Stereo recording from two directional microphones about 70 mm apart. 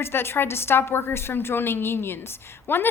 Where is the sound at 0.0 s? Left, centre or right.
Left.